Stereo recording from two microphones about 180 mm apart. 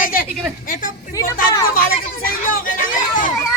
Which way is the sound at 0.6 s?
50° left (ahead or behind).